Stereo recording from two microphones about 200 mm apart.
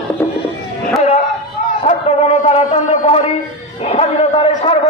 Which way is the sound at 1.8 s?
30° left (ahead or behind).